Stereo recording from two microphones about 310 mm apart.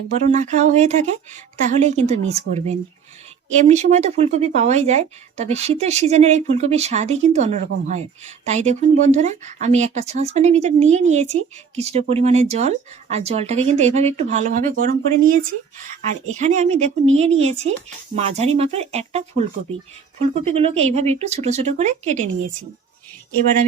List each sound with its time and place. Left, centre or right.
0.3 s speech: right